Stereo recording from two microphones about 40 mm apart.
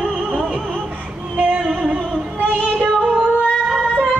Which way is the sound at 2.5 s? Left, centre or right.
Right.